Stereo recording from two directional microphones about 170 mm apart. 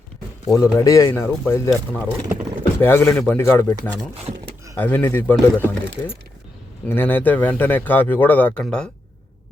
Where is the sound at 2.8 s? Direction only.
15° left (ahead or behind).